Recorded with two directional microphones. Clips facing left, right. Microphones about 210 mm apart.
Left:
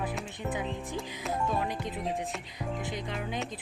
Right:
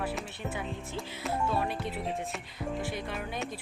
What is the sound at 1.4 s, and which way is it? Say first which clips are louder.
Speech: even; 15° left (ahead or behind).